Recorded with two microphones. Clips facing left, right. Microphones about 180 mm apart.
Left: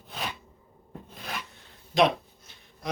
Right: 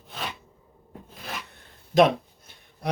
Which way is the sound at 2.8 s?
60° right (ahead or behind).